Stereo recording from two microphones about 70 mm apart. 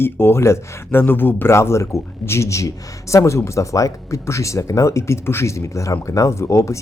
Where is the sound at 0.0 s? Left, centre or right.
Left.